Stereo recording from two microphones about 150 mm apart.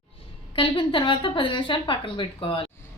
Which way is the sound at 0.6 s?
35° left (ahead or behind).